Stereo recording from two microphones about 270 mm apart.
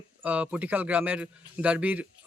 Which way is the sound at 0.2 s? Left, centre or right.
Centre.